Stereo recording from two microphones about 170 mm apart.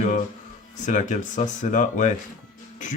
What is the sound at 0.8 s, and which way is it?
Speech, 45° left (ahead or behind).